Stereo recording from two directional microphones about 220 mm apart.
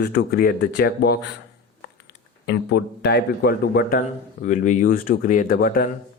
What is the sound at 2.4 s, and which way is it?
Speech, 50° left (ahead or behind).